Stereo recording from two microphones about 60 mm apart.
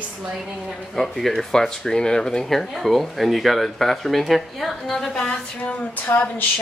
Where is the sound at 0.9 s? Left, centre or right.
Centre.